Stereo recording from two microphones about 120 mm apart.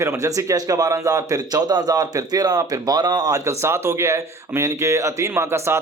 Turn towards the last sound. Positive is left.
turn(degrees=-20)  # may be behind; listen again after turning